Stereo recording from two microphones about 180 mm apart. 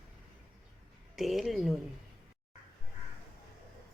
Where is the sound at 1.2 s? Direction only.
Centre (ahead or behind).